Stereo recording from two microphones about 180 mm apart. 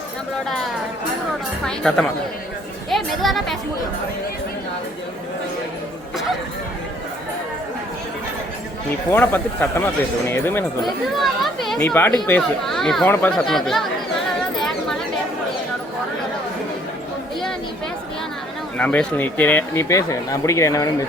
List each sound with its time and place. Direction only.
1.6 s speech: 5° left (ahead or behind)
9.0 s speech: 10° left (ahead or behind)
11.2 s speech: centre (ahead or behind)
14.6 s a sound: centre (ahead or behind)
18.8 s speech: 10° left (ahead or behind)